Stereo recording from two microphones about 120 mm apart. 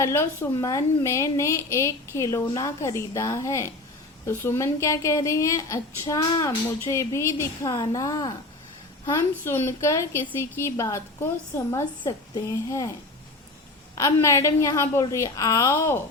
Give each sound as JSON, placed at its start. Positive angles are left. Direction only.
{"t": 0.0, "sound": "a woman's voice", "side_deg": 20}
{"t": 9.4, "sound": "a woman's voice", "side_deg": 20}
{"t": 13.9, "sound": "a woman's voice", "side_deg": 25}